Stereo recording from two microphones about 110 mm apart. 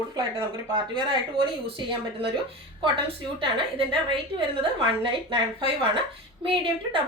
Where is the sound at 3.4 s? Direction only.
50° right (ahead or behind).